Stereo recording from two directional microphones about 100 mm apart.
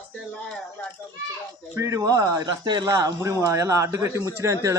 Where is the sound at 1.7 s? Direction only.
35° right (ahead or behind).